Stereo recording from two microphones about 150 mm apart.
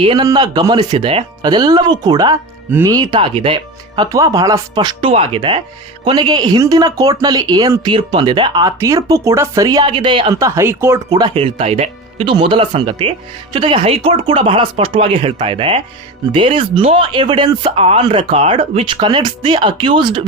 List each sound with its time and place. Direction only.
0.0 s speech: 35° right (ahead or behind)
2.6 s speech: 15° right (ahead or behind)
2.9 s speech: 30° right (ahead or behind)
10.4 s speech: 20° right (ahead or behind)
11.2 s speech: 35° right (ahead or behind)